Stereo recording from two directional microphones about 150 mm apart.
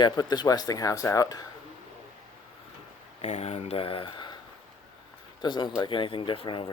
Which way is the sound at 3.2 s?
45° left (ahead or behind).